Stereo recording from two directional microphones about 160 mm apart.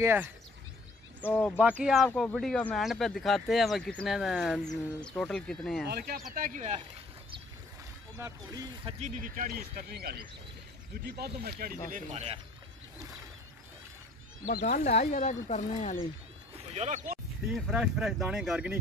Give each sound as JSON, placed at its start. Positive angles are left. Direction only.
{"t": 0.0, "sound": "speech", "side_deg": -15}
{"t": 1.2, "sound": "speech", "side_deg": 10}
{"t": 1.6, "sound": "speech", "side_deg": -5}
{"t": 5.9, "sound": "speech", "side_deg": -75}
{"t": 8.2, "sound": "speech", "side_deg": -20}
{"t": 8.8, "sound": "speech", "side_deg": -50}
{"t": 12.1, "sound": "speech", "side_deg": -45}
{"t": 14.6, "sound": "speech", "side_deg": 45}
{"t": 16.5, "sound": "a sound", "side_deg": -45}
{"t": 17.5, "sound": "speech", "side_deg": -5}